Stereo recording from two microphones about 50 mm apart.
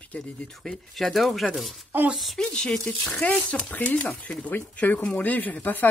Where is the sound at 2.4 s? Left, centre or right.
Centre.